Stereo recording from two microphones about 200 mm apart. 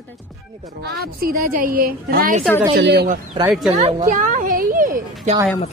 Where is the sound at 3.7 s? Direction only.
35° right (ahead or behind).